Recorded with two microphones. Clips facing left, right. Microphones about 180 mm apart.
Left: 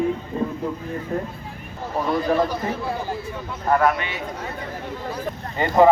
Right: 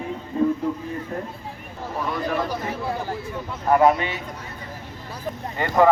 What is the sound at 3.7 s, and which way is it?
Speech, 20° right (ahead or behind).